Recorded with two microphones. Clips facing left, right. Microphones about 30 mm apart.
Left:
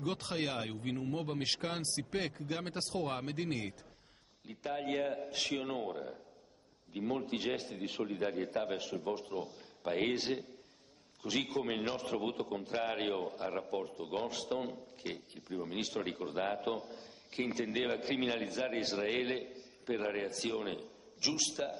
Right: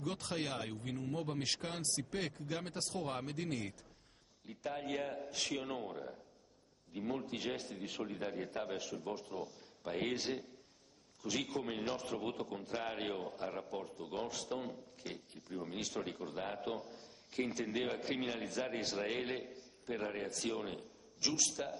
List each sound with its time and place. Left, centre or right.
0.0 s a man's voice: centre
1.2 s a man's voice: centre
2.1 s a man's voice: centre
3.0 s a man's voice: centre
15.0 s a man's voice: left
17.3 s a man's voice: left
17.6 s a man's voice: centre